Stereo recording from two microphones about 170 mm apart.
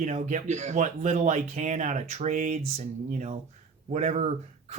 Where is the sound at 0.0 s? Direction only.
45° right (ahead or behind).